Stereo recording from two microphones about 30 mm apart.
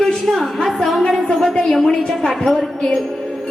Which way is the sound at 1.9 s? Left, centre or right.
Left.